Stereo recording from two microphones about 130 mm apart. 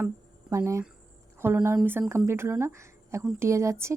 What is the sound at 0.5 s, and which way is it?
Speech, 20° right (ahead or behind).